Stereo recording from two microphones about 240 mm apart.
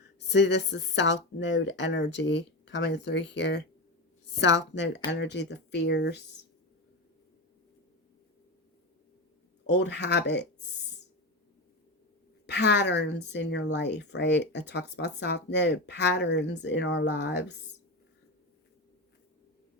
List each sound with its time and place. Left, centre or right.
0.2 s speech: left
9.6 s speech: left
12.5 s speech: left